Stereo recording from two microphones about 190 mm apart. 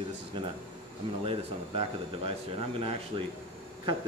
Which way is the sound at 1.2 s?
30° right (ahead or behind).